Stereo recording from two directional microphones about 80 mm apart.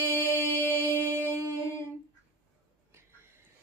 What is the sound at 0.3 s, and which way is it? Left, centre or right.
Music, left.